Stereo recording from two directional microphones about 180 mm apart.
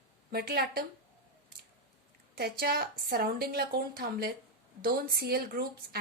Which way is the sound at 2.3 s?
60° right (ahead or behind).